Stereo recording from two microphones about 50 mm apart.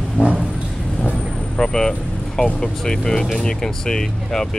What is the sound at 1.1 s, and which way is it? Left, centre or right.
Speech, centre.